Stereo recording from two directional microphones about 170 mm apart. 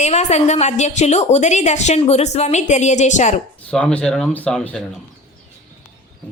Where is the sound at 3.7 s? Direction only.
5° left (ahead or behind).